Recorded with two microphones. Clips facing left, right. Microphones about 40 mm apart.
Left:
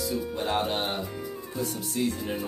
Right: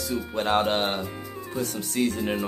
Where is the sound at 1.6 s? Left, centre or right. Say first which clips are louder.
Right 2 dB; right.